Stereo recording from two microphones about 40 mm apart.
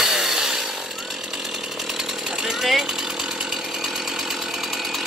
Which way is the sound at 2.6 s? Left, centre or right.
Centre.